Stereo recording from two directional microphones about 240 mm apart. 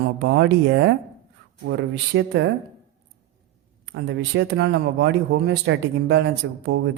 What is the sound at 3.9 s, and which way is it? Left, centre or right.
Speech, right.